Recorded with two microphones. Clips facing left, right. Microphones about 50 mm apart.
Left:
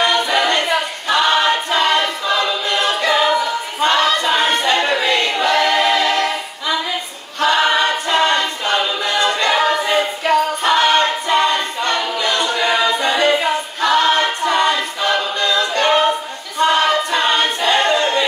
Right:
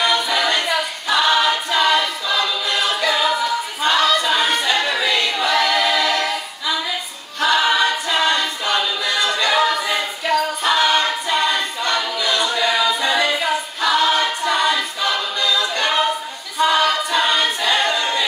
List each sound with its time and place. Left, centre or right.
0.0 s a capella: left
1.3 s choir: left
5.4 s a capella: left
7.4 s choir: left
9.3 s a capella: left